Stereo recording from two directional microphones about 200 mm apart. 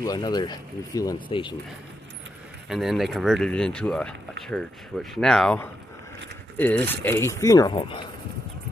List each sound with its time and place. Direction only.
0.0 s speech: 20° left (ahead or behind)
2.7 s speech: centre (ahead or behind); by 8.1 s 25° left (ahead or behind)